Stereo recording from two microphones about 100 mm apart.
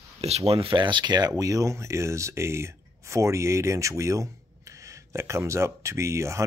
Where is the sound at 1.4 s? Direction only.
35° right (ahead or behind).